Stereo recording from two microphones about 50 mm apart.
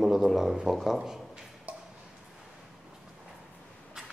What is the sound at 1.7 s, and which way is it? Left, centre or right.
Tick-tock, right.